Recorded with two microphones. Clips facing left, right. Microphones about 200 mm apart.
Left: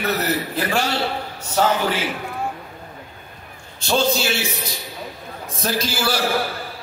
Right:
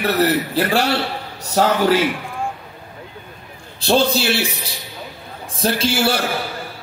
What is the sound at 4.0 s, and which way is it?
Speech, 30° right (ahead or behind).